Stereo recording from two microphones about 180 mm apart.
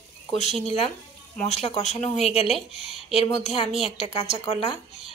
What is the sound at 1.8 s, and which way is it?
Speech, 40° left (ahead or behind).